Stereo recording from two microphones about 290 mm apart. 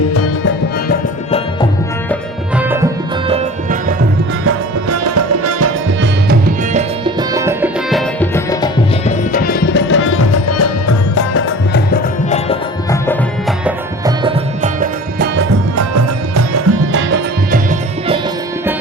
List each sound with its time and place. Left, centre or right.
2.6 s tabla: centre
3.2 s music: right
4.4 s music: right
6.2 s music: right
7.0 s music: centre
8.4 s music: centre
9.3 s music: left
12.3 s music: centre
13.7 s music: centre
14.8 s music: right
15.7 s music: right